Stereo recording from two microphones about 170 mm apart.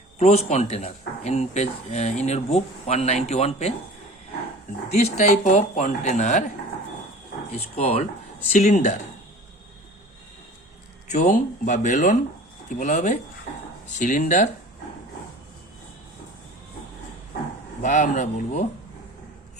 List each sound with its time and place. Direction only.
0.2 s speech: 40° left (ahead or behind)
4.9 s speech: 45° left (ahead or behind)
7.5 s speech: 35° left (ahead or behind)
11.1 s speech: 45° left (ahead or behind)
17.8 s speech: 45° left (ahead or behind)